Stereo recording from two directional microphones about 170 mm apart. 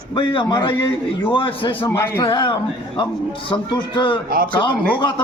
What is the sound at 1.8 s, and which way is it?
Speech, 15° left (ahead or behind).